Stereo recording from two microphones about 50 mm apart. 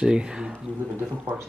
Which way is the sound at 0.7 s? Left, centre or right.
Left.